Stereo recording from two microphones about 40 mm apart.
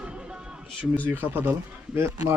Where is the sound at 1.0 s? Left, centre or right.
Right.